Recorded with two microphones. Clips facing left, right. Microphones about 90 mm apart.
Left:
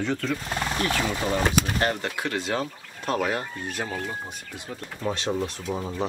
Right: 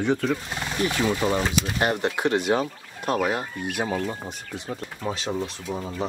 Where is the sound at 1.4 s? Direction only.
55° left (ahead or behind).